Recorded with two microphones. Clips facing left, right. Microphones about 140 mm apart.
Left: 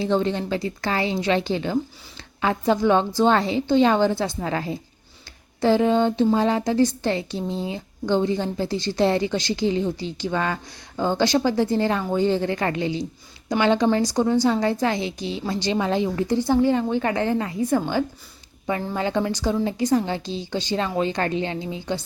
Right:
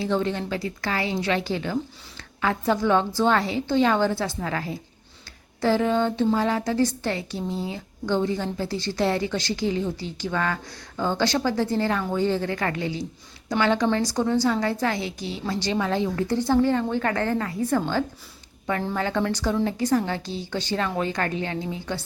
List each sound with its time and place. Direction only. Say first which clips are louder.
0.0 s a woman's voice: left 3 dB; 25° left (ahead or behind)